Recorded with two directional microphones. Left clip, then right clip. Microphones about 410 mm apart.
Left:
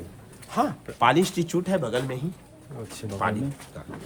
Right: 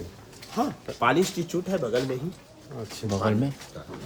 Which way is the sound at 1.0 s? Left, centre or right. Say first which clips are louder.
Left 2 dB; centre.